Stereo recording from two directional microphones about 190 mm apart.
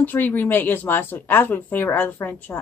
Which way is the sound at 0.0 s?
10° left (ahead or behind).